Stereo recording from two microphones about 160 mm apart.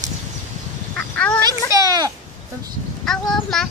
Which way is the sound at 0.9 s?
10° left (ahead or behind).